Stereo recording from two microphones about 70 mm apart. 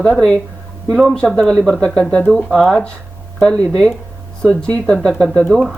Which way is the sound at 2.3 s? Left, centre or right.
Centre.